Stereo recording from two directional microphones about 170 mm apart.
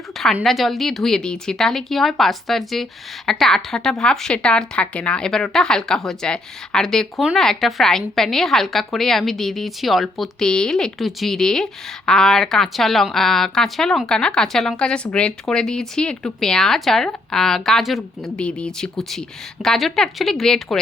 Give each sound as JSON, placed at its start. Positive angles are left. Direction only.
{"t": 0.3, "sound": "a woman's voice", "side_deg": 0}